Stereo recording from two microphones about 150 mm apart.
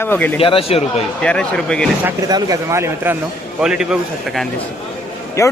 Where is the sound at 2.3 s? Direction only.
20° right (ahead or behind).